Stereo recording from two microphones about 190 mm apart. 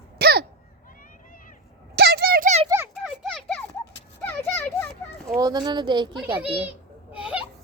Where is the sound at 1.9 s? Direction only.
55° right (ahead or behind).